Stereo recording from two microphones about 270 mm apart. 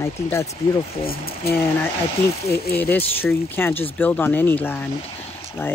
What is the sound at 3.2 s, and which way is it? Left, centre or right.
Speech, centre.